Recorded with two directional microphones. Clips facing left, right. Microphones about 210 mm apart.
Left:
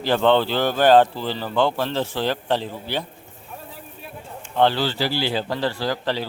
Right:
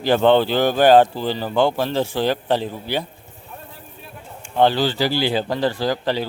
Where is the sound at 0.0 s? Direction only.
15° right (ahead or behind).